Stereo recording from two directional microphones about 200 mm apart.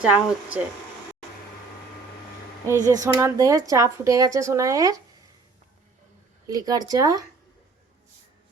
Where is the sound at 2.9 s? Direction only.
15° right (ahead or behind).